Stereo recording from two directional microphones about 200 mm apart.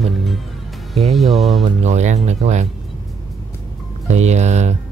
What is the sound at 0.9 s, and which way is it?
Speech, centre (ahead or behind).